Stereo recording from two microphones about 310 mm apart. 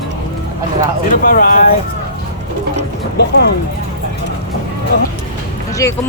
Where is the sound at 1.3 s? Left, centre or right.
Left.